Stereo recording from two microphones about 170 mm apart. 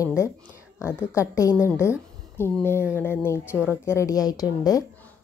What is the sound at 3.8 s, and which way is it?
A woman's voice, 15° left (ahead or behind).